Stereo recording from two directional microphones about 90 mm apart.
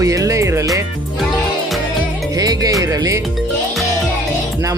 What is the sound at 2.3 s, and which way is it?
Speech, 45° right (ahead or behind).